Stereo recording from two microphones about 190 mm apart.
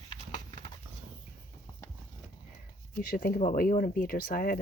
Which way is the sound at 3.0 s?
50° left (ahead or behind).